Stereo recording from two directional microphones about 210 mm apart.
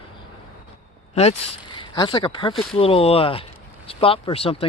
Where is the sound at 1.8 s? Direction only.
20° left (ahead or behind).